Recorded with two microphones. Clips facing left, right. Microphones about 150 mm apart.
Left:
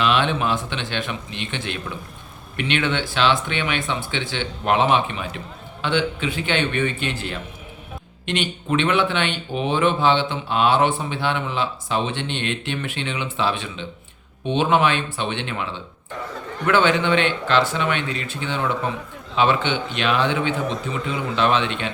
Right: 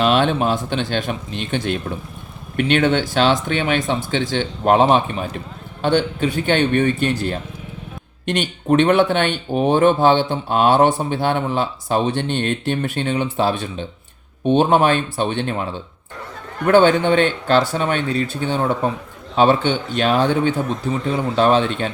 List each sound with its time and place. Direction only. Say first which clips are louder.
0.0 s speech: right 4 dB; 45° right (ahead or behind)